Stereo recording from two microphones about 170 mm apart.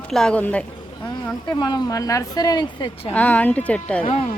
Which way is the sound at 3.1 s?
10° left (ahead or behind).